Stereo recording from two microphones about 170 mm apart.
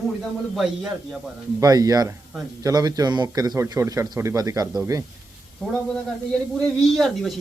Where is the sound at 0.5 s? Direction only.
5° right (ahead or behind).